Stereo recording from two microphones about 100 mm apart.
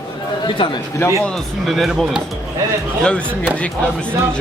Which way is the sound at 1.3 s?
Centre (ahead or behind).